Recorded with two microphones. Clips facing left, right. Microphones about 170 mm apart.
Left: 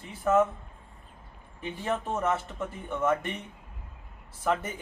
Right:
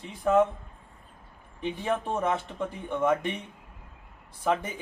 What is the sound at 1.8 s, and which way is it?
Speech, 10° right (ahead or behind).